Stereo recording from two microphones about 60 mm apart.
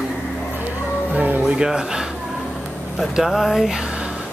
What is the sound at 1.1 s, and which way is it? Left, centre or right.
Music, right.